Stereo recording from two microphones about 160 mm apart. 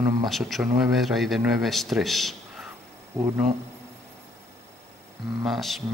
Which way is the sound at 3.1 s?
15° right (ahead or behind).